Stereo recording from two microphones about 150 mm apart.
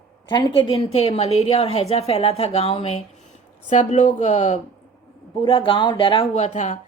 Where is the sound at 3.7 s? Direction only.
55° left (ahead or behind).